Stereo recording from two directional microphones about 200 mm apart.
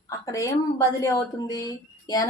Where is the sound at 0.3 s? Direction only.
15° left (ahead or behind).